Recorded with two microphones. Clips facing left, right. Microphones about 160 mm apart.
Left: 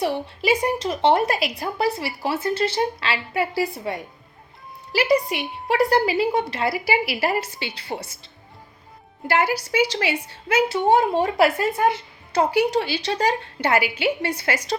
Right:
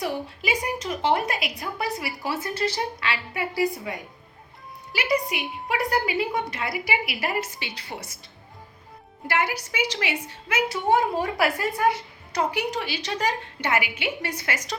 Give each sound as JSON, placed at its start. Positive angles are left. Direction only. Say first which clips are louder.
{"t": 0.0, "sound": "a woman's voice", "louder": "left 5 dB", "side_deg": 30}
{"t": 9.2, "sound": "a woman's voice", "louder": "left 5 dB", "side_deg": 30}